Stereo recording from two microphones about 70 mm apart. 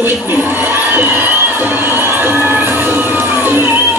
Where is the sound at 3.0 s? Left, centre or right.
Left.